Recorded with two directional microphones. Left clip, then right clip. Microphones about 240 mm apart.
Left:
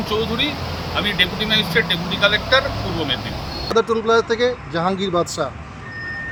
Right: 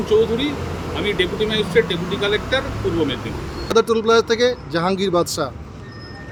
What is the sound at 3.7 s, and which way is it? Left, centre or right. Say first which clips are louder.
Speech: right 2 dB; centre.